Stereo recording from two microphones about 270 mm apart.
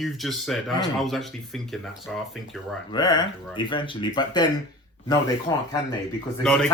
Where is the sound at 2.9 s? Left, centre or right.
Centre.